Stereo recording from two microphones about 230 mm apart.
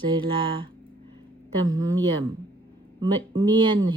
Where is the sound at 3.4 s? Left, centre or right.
Right.